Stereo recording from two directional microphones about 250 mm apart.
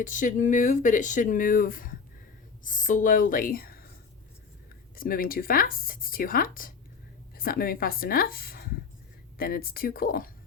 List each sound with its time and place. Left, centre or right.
0.0 s speech: left
4.9 s speech: left